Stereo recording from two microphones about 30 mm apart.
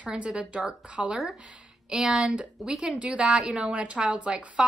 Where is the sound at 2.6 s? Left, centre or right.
Centre.